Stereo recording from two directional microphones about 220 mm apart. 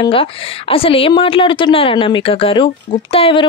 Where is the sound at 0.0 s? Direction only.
25° left (ahead or behind).